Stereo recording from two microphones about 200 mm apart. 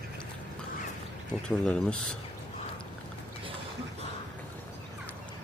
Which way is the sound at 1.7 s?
5° left (ahead or behind).